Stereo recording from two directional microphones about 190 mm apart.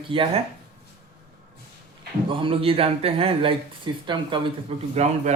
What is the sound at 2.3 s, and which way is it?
A man's voice, 30° right (ahead or behind).